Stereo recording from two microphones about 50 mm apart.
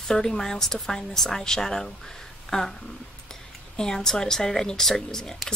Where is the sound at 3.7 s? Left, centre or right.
Centre.